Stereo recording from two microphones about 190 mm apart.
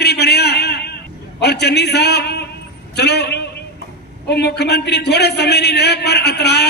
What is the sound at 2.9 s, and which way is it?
A man's voice, 60° left (ahead or behind).